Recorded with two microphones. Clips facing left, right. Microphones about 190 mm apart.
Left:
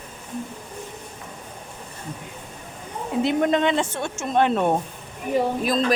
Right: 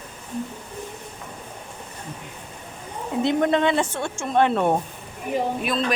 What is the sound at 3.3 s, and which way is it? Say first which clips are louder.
Speech: right 1 dB; 15° left (ahead or behind).